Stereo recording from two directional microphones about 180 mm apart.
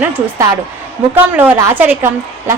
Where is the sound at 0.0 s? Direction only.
10° right (ahead or behind).